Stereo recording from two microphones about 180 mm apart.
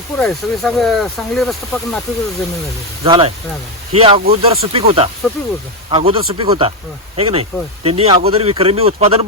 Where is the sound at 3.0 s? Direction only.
30° right (ahead or behind).